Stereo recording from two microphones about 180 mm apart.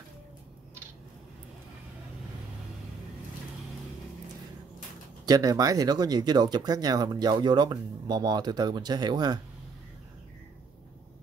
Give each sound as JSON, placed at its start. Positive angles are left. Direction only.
{"t": 5.2, "sound": "speech", "side_deg": -20}